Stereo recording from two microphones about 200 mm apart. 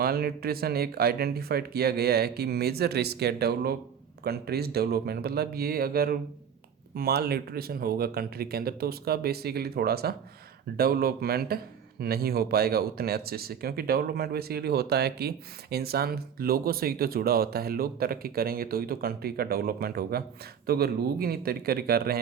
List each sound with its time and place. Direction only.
0.0 s speech: 50° right (ahead or behind)